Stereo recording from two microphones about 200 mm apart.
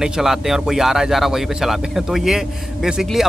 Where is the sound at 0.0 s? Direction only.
Centre (ahead or behind).